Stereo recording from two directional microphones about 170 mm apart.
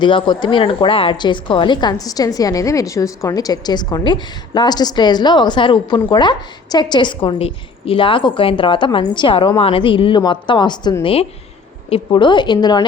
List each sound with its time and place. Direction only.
0.0 s a woman's voice: 30° left (ahead or behind)